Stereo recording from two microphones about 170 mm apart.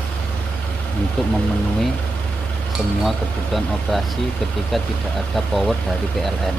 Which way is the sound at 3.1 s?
Centre (ahead or behind).